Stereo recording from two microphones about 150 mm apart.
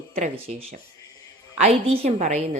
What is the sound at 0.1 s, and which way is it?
A woman's voice, 40° right (ahead or behind).